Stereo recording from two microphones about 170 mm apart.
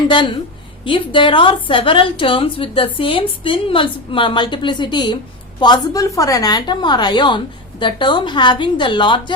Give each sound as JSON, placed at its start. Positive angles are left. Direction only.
{"t": 0.1, "sound": "a woman's voice", "side_deg": 30}